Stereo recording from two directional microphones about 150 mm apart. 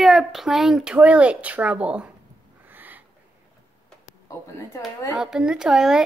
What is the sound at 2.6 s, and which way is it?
Owl, 10° right (ahead or behind).